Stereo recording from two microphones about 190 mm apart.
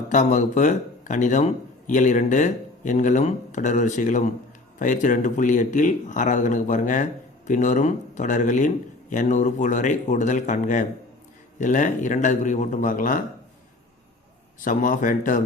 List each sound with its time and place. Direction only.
0.1 s speech: 40° left (ahead or behind)
14.6 s speech: 45° left (ahead or behind)